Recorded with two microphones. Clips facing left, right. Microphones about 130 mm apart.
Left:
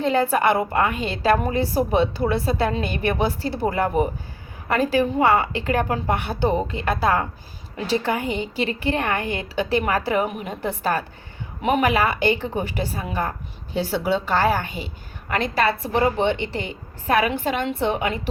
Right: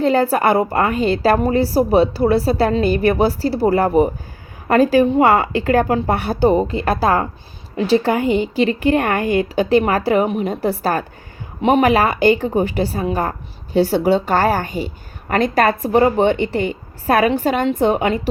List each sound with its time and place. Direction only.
0.0 s a woman's voice: 40° right (ahead or behind)
5.1 s speech: 80° right
6.1 s a woman's voice: 35° right (ahead or behind)
8.8 s a woman's voice: 45° right (ahead or behind)